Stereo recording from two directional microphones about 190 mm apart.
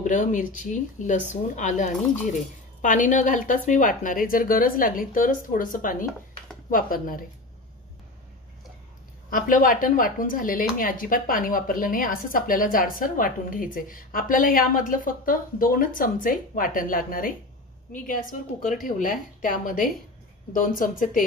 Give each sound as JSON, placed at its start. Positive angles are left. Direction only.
{"t": 0.0, "sound": "speech", "side_deg": 40}
{"t": 9.3, "sound": "speech", "side_deg": 45}